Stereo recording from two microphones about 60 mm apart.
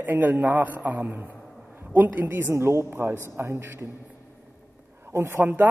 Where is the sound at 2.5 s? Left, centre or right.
Right.